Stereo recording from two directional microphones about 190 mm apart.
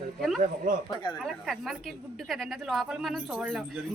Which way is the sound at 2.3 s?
Centre (ahead or behind).